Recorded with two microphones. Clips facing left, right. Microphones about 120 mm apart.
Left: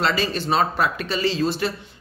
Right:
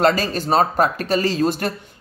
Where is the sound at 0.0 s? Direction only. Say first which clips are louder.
Right 5 dB; 45° right (ahead or behind).